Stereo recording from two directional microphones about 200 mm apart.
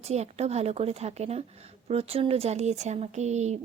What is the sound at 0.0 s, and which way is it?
Speech, 30° right (ahead or behind).